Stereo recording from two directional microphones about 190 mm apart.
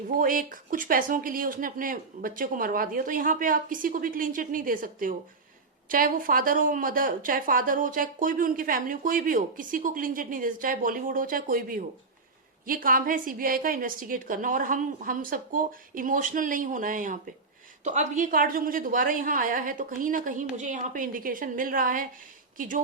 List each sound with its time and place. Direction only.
0.2 s a woman's voice: 45° right (ahead or behind)